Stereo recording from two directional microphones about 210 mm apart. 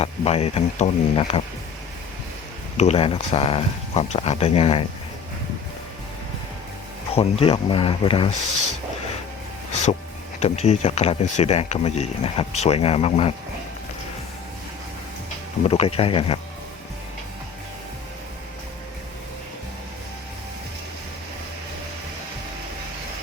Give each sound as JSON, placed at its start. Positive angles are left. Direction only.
{"t": 0.0, "sound": "speech", "side_deg": 30}
{"t": 2.7, "sound": "speech", "side_deg": 30}
{"t": 7.1, "sound": "speech", "side_deg": 25}
{"t": 10.4, "sound": "speech", "side_deg": 30}
{"t": 15.6, "sound": "speech", "side_deg": 30}